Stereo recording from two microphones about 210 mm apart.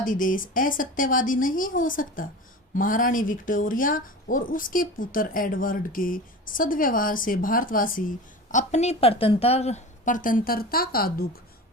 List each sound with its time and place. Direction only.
0.0 s speech: 40° left (ahead or behind)